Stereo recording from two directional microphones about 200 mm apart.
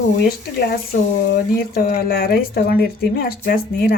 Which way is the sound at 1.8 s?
45° left (ahead or behind).